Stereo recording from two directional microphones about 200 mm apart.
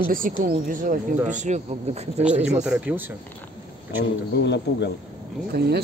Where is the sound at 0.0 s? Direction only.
45° right (ahead or behind).